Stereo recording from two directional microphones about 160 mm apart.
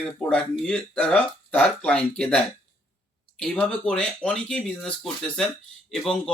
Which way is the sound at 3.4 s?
5° left (ahead or behind).